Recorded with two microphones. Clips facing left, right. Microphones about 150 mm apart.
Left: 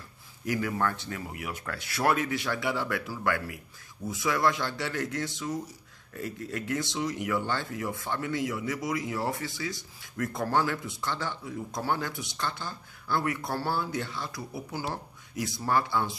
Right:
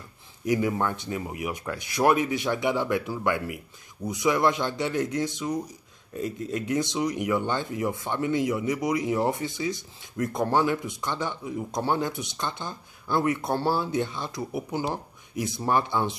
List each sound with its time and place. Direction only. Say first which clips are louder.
0.5 s speech: right 4 dB; 20° right (ahead or behind)